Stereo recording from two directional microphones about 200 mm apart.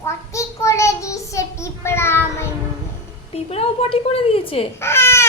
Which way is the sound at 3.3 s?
30° left (ahead or behind).